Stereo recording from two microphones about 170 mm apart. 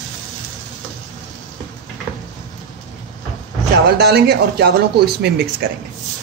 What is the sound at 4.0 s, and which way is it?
Speech, 70° right (ahead or behind).